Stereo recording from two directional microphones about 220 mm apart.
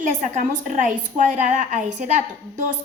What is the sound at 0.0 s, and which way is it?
A woman's voice, 35° right (ahead or behind).